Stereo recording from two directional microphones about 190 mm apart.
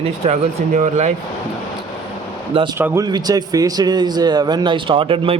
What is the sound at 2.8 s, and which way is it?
A man's voice, 15° right (ahead or behind).